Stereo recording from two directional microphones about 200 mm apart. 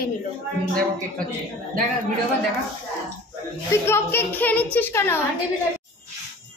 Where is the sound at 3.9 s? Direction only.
10° left (ahead or behind).